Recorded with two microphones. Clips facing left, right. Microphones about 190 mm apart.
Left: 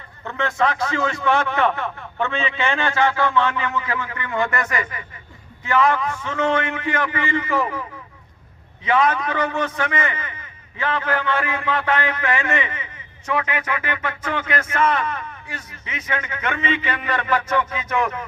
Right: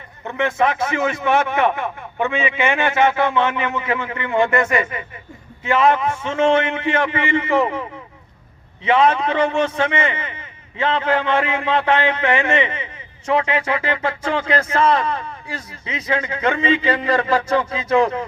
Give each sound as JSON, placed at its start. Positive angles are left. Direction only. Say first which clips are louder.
{"t": 0.3, "sound": "a man's voice", "louder": "right 3 dB", "side_deg": -20}